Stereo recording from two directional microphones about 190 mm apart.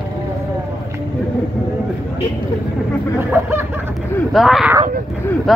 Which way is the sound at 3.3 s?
10° right (ahead or behind).